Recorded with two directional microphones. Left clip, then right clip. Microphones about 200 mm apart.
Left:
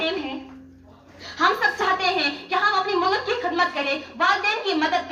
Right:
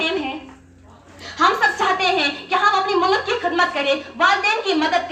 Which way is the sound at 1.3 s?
25° right (ahead or behind).